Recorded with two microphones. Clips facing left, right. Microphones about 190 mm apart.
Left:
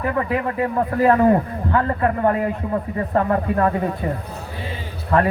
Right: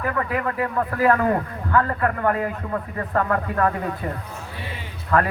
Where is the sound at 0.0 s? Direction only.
25° left (ahead or behind).